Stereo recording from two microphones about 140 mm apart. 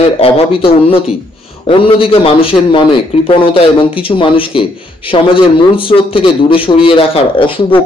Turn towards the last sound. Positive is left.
turn(degrees=40)  # may be behind; listen again after turning